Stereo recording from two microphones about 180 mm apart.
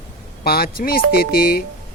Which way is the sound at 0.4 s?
55° left (ahead or behind).